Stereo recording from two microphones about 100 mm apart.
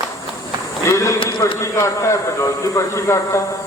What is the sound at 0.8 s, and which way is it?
A man's voice, 30° left (ahead or behind).